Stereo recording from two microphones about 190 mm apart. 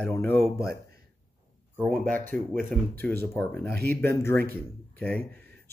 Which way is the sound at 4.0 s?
15° left (ahead or behind).